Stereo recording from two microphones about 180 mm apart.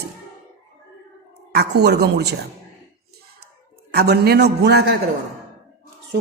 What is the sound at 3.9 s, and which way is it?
A woman's voice, 60° right (ahead or behind).